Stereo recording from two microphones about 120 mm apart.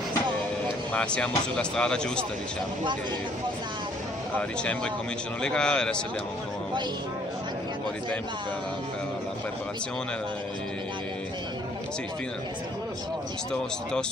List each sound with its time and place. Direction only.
0.9 s speech: 10° left (ahead or behind)
4.4 s speech: 10° left (ahead or behind)